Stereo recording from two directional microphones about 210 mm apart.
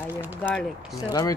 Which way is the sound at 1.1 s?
20° left (ahead or behind).